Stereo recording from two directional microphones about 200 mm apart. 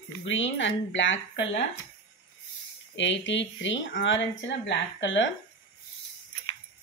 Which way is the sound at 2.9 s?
65° left (ahead or behind).